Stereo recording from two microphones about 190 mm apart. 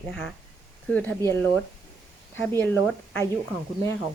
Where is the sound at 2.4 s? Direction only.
10° left (ahead or behind).